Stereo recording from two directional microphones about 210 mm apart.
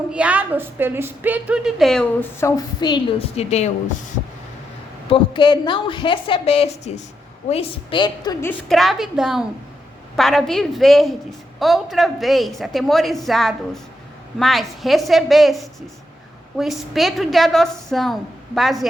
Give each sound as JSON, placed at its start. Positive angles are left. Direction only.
{"t": 0.1, "sound": "a woman's voice", "side_deg": -5}
{"t": 2.4, "sound": "a woman's voice", "side_deg": 20}
{"t": 8.7, "sound": "a woman's voice", "side_deg": 0}